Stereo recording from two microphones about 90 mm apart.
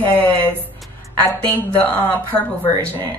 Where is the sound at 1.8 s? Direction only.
20° left (ahead or behind).